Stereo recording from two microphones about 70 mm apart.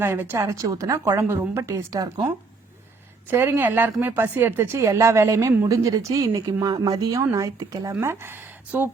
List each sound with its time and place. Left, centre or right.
0.0 s a woman's voice: right
0.3 s a woman's voice: right
1.1 s a woman's voice: right
3.2 s a woman's voice: right
4.8 s a woman's voice: right
6.4 s speech: right
7.2 s a woman's voice: right
8.0 s speech: right